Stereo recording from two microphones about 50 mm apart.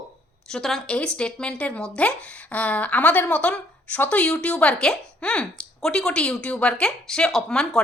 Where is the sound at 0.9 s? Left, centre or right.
Left.